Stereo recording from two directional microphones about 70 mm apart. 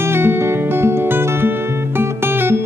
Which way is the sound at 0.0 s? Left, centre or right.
Right.